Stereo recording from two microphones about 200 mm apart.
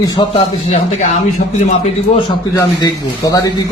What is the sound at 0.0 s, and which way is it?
A man's voice, 20° left (ahead or behind).